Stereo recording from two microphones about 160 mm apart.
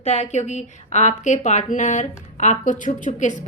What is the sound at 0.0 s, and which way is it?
A woman's voice, 45° left (ahead or behind).